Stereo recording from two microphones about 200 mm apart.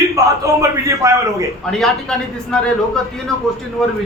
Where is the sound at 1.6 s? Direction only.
Centre (ahead or behind).